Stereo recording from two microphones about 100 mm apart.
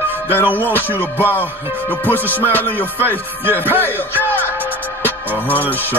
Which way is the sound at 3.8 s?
20° left (ahead or behind).